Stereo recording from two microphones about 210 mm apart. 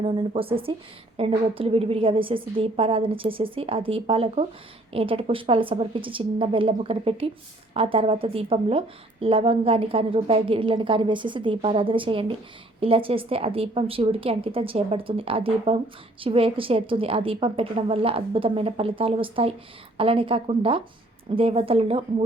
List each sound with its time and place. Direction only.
0.0 s a woman's voice: 25° right (ahead or behind)